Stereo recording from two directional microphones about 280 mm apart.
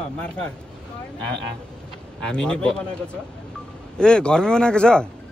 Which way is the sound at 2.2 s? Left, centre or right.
Centre.